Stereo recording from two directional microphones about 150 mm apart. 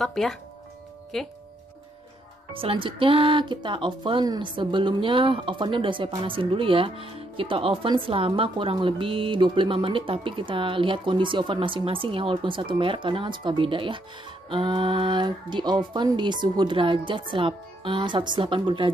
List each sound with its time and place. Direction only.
0.0 s speech: 5° left (ahead or behind)
2.5 s speech: 35° right (ahead or behind)